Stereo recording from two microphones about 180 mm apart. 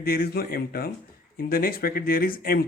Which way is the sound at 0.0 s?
55° left (ahead or behind).